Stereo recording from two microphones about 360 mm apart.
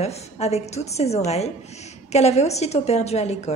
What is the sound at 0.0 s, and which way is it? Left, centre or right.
A woman's voice, centre.